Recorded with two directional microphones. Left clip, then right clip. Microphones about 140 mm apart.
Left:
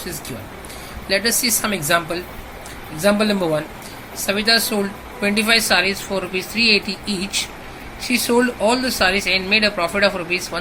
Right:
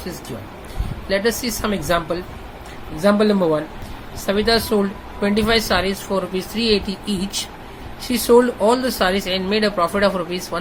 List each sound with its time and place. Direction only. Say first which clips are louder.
1.0 s speech: left 1 dB; 40° right (ahead or behind)